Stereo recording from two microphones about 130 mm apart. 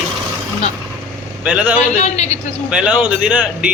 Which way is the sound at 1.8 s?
60° left (ahead or behind).